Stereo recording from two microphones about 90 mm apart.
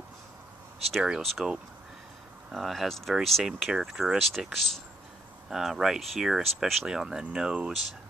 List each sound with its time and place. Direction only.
0.9 s speech: 10° right (ahead or behind)
2.5 s speech: centre (ahead or behind)